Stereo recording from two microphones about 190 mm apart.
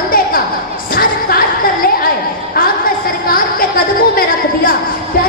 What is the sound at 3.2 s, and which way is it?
A woman's voice, 50° left (ahead or behind).